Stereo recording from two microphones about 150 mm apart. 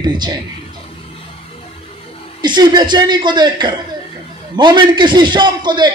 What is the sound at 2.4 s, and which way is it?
A man's voice, 30° right (ahead or behind).